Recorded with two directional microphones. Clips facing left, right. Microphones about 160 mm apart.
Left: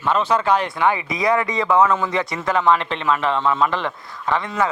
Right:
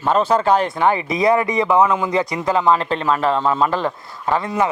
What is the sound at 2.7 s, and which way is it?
Speech, 40° right (ahead or behind).